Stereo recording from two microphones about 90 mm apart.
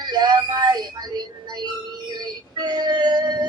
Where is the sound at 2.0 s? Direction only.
50° right (ahead or behind).